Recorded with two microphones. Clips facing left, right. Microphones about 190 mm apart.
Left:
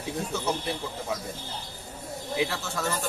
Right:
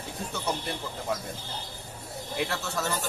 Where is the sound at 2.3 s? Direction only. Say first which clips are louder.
Left 1 dB; centre (ahead or behind).